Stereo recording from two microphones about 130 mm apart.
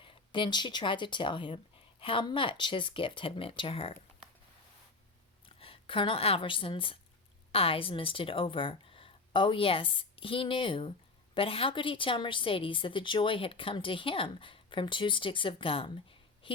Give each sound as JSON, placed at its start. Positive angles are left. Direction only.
{"t": 0.0, "sound": "speech", "side_deg": 40}
{"t": 5.5, "sound": "a woman's voice", "side_deg": 45}